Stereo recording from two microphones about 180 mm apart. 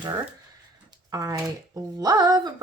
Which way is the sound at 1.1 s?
20° right (ahead or behind).